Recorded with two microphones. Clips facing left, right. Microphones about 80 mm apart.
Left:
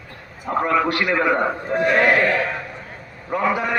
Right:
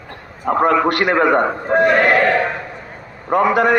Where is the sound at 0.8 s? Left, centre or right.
Right.